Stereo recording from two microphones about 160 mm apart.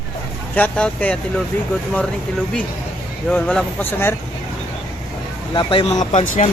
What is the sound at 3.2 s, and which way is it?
Speech, 5° left (ahead or behind).